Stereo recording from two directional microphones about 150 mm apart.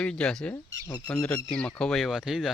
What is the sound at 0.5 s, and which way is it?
Speech, 20° left (ahead or behind).